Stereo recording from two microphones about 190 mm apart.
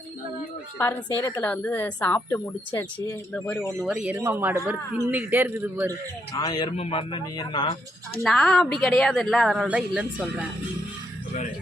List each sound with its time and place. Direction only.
0.8 s a woman's voice: 15° left (ahead or behind)
3.8 s a man's voice: 5° right (ahead or behind)
6.3 s speech: 20° left (ahead or behind)
8.2 s speech: centre (ahead or behind)